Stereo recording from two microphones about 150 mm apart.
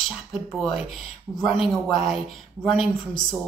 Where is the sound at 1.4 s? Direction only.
Centre (ahead or behind).